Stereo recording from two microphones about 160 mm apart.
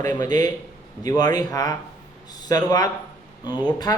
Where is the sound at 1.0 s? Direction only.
25° left (ahead or behind).